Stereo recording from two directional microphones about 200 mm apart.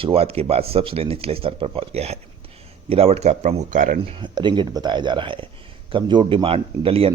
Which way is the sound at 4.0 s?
25° right (ahead or behind).